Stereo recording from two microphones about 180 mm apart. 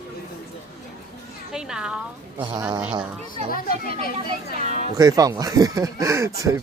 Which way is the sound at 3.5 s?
55° left (ahead or behind).